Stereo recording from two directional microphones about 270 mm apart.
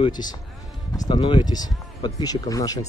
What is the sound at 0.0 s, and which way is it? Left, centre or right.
Speech, centre.